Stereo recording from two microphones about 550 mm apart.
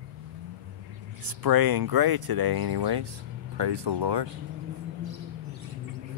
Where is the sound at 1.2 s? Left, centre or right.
Right.